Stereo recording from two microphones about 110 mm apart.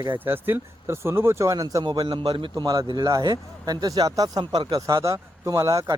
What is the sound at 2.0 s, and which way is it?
A man's voice, 50° right (ahead or behind).